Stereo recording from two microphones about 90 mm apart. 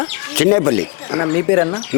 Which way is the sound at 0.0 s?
25° left (ahead or behind).